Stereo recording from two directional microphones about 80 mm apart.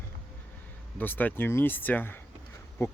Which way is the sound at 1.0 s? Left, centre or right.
Left.